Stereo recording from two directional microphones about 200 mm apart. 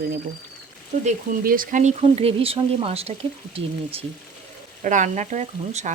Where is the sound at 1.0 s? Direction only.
45° right (ahead or behind).